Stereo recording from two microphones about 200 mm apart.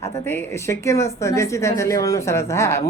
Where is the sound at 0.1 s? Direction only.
10° left (ahead or behind).